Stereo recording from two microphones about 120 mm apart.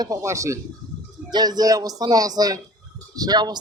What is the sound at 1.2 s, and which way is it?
A man's voice, 35° right (ahead or behind).